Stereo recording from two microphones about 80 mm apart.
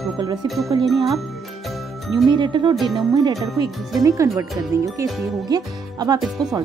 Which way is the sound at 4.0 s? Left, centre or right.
Right.